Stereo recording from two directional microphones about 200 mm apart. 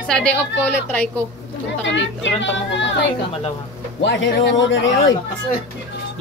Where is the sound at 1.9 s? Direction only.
65° left (ahead or behind).